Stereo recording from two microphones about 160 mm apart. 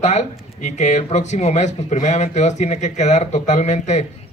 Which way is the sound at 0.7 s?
45° left (ahead or behind).